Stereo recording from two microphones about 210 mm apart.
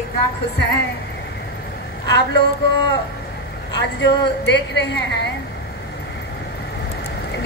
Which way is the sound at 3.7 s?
55° left (ahead or behind).